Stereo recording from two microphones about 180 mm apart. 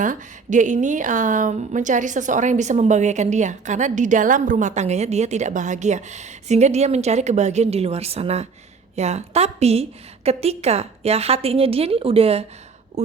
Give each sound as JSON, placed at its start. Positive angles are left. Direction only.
{"t": 0.0, "sound": "speech", "side_deg": -45}